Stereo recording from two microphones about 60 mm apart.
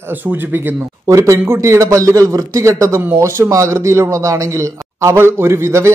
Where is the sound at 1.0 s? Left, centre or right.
Right.